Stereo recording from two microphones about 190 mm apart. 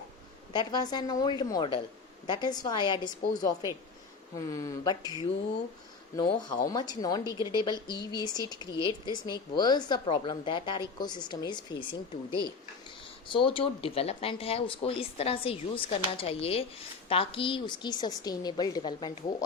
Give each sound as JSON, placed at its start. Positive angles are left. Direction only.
{"t": 0.5, "sound": "speech", "side_deg": 20}
{"t": 6.2, "sound": "speech", "side_deg": 45}
{"t": 6.7, "sound": "speech", "side_deg": 20}
{"t": 13.2, "sound": "speech", "side_deg": 25}